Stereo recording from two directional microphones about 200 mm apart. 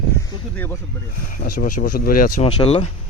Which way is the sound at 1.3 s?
45° left (ahead or behind).